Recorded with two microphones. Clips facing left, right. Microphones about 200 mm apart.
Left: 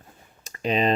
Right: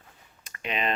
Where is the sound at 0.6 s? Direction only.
35° left (ahead or behind).